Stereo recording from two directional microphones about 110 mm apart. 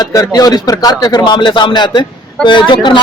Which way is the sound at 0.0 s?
35° left (ahead or behind).